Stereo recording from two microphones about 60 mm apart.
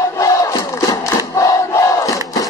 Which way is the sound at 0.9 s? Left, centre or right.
Left.